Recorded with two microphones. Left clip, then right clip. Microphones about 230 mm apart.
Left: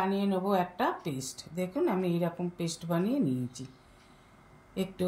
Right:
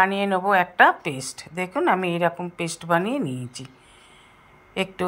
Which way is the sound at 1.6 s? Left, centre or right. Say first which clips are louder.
Right 9 dB; right.